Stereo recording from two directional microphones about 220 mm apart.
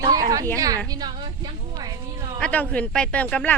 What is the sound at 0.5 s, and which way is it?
Speech, 15° right (ahead or behind).